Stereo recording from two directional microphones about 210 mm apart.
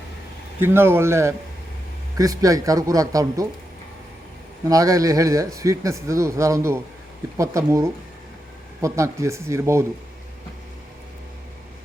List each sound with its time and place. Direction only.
0.6 s speech: 10° right (ahead or behind)
4.7 s speech: 15° right (ahead or behind)